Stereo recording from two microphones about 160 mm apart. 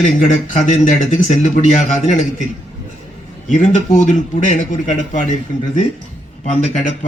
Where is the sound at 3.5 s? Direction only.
55° left (ahead or behind).